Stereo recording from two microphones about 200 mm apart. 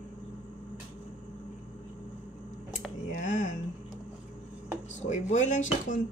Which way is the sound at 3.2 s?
40° left (ahead or behind).